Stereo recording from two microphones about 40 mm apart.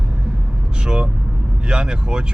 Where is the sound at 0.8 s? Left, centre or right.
Right.